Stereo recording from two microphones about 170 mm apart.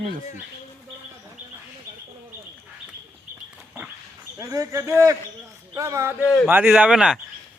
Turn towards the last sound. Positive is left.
turn(degrees=-5)  # may be behind; listen again after turning